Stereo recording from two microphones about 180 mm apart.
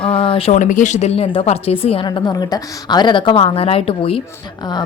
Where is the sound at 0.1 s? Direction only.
30° left (ahead or behind).